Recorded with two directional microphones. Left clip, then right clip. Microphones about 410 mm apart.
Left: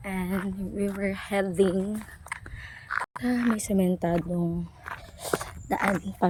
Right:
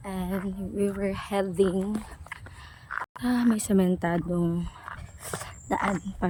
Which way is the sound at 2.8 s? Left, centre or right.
Left.